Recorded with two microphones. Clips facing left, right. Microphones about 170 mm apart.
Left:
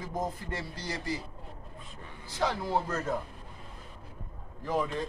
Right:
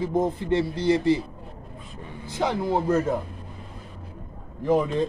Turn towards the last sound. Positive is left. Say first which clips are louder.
# right 9 dB
turn(degrees=-20)  # may be behind; listen again after turning